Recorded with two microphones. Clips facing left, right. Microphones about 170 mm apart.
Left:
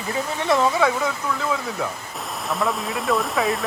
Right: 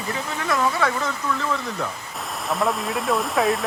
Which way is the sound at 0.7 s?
10° left (ahead or behind).